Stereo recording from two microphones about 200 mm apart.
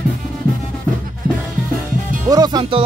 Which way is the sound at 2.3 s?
20° right (ahead or behind).